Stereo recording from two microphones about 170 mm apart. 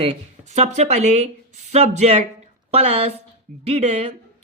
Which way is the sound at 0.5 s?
40° right (ahead or behind).